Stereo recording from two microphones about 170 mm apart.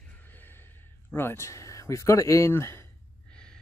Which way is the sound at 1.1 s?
15° left (ahead or behind).